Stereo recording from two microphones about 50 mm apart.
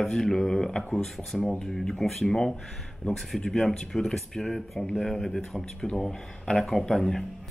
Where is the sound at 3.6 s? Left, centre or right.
Left.